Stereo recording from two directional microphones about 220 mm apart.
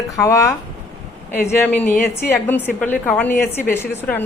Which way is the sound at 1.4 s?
10° left (ahead or behind).